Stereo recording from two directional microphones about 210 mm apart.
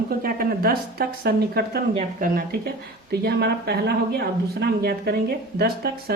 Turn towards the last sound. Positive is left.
turn(degrees=-45)  # may be behind; listen again after turning